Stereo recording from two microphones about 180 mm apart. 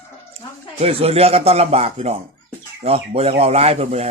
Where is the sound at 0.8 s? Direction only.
35° right (ahead or behind).